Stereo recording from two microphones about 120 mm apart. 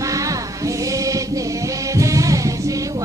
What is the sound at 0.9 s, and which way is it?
Choir, 25° right (ahead or behind).